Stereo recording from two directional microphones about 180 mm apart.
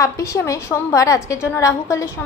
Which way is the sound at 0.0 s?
15° left (ahead or behind).